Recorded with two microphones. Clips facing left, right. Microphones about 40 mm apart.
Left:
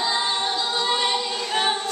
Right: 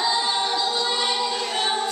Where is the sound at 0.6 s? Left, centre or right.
Left.